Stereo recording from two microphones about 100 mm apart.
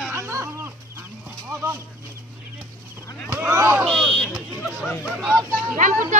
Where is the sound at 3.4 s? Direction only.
30° right (ahead or behind).